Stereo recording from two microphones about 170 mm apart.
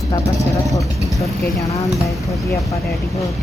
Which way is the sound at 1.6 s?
20° left (ahead or behind).